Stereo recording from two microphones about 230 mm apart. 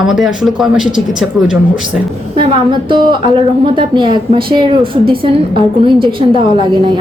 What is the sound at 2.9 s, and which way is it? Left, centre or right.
Speech, right.